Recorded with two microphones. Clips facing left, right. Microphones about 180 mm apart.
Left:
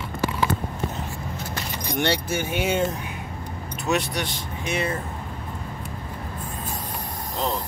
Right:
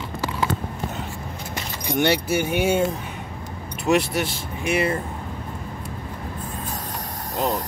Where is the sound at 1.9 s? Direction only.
10° right (ahead or behind).